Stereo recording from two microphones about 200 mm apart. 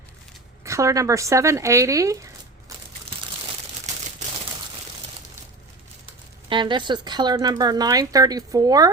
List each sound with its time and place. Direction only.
0.6 s speech: 15° right (ahead or behind)
6.5 s speech: 25° right (ahead or behind)